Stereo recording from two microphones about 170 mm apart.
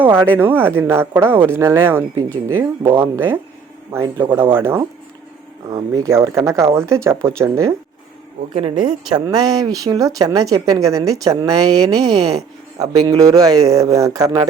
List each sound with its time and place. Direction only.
0.0 s speech: 10° right (ahead or behind)
9.0 s speech: 25° right (ahead or behind)
12.8 s speech: 20° right (ahead or behind)